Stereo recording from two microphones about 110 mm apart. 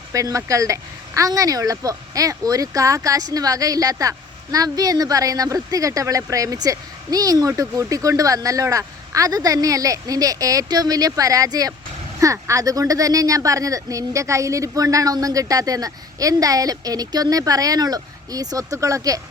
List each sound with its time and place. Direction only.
0.1 s speech: 30° right (ahead or behind)